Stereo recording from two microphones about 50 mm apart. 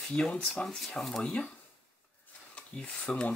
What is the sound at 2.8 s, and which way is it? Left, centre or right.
Speech, centre.